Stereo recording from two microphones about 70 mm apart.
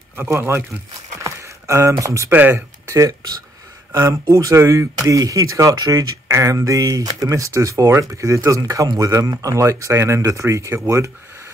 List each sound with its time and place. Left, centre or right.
0.3 s speech: right
1.2 s a sound: right
2.2 s speech: right
2.9 s speech: right
4.3 s speech: right
4.9 s speech: right